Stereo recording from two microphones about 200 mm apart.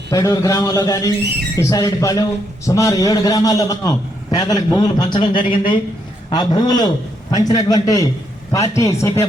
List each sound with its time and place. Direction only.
0.1 s a man's voice: 15° left (ahead or behind)